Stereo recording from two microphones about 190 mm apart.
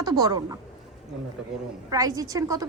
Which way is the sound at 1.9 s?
20° right (ahead or behind).